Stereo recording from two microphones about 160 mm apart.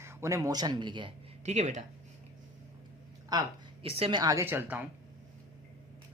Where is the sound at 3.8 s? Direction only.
35° right (ahead or behind); by 4.8 s 15° right (ahead or behind).